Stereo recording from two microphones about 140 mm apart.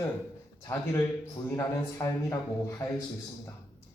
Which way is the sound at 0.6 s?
20° left (ahead or behind).